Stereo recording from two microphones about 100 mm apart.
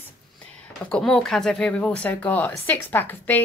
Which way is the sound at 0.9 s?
5° left (ahead or behind).